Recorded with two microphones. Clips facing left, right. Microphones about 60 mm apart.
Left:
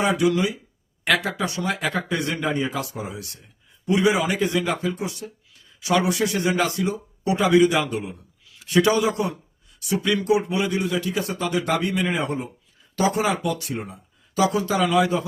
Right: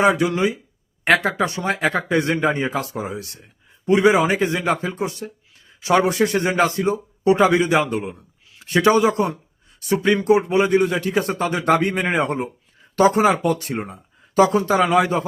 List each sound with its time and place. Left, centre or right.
0.0 s speech: right